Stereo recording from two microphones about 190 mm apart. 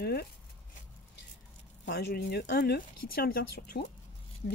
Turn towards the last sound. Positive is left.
turn(degrees=55)  # may be behind; listen again after turning